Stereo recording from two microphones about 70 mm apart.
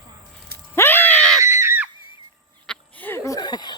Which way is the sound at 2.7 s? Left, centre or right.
Centre.